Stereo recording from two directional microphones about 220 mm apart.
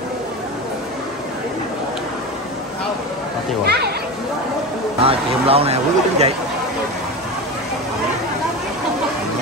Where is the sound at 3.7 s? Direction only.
45° right (ahead or behind).